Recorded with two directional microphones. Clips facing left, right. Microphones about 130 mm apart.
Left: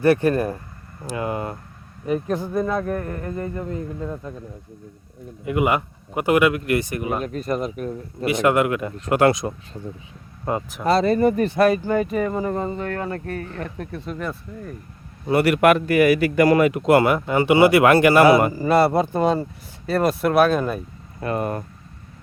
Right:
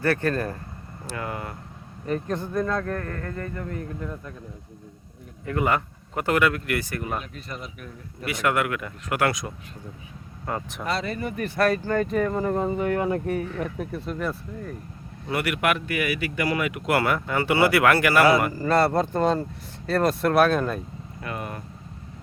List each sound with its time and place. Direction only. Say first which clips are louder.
0.0 s speech: left 6 dB; 15° left (ahead or behind)
2.0 s speech: left 4 dB; 10° left (ahead or behind)
5.5 s speech: left 4 dB; 15° left (ahead or behind)
7.2 s speech: left 12 dB; 45° left (ahead or behind)
8.2 s speech: left 6 dB; 25° left (ahead or behind)
10.8 s speech: left 12 dB; 35° left (ahead or behind)
11.4 s speech: left 5 dB; 20° left (ahead or behind); by 14.8 s centre (ahead or behind)
15.3 s speech: left 9 dB; 30° left (ahead or behind)
18.5 s speech: left 4 dB; 10° left (ahead or behind)
21.2 s speech: left 9 dB; 40° left (ahead or behind)